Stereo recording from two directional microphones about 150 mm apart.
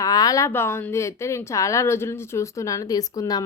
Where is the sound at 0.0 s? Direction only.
25° left (ahead or behind).